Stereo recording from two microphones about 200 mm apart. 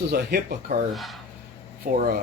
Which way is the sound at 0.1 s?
50° right (ahead or behind).